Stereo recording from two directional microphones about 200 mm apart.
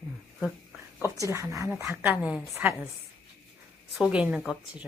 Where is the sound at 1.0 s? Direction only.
15° right (ahead or behind).